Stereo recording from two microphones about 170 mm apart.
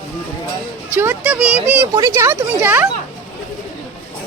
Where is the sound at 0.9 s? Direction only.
15° right (ahead or behind).